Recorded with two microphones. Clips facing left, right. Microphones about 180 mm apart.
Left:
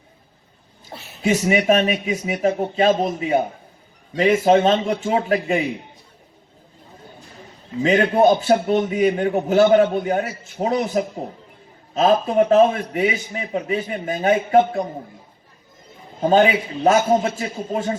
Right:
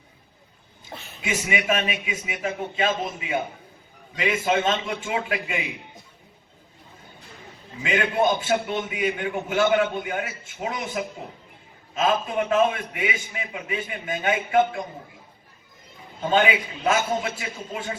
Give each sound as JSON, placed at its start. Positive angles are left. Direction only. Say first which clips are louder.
{"t": 0.9, "sound": "a sound", "louder": "left 2 dB", "side_deg": 5}
{"t": 1.2, "sound": "a man's voice", "louder": "left 9 dB", "side_deg": 40}
{"t": 7.8, "sound": "a man's voice", "louder": "left 7 dB", "side_deg": 40}
{"t": 16.2, "sound": "a man's voice", "louder": "left 6 dB", "side_deg": 40}